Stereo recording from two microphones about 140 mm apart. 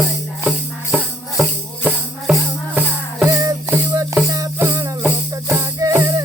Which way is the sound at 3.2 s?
25° right (ahead or behind).